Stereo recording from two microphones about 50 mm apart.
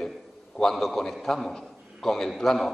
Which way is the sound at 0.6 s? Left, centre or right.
Centre.